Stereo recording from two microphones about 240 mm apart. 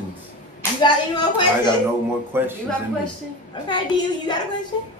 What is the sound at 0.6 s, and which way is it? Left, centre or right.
Speech, centre.